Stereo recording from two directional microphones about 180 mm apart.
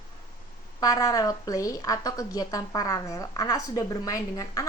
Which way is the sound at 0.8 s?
20° left (ahead or behind).